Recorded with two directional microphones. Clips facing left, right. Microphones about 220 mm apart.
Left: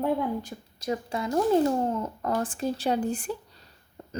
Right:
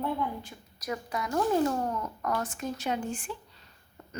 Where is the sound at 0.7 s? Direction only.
25° left (ahead or behind).